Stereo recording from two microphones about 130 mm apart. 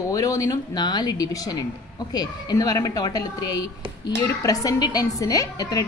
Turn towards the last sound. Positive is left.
turn(degrees=30)  # may be behind; listen again after turning